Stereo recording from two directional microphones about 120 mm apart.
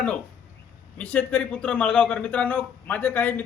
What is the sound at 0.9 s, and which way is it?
A man's voice, 10° left (ahead or behind).